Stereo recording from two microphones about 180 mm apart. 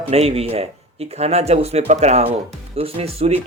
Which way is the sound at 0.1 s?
35° right (ahead or behind).